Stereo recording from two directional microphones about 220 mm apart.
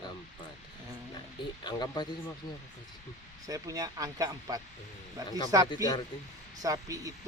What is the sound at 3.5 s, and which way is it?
Speech, 15° right (ahead or behind).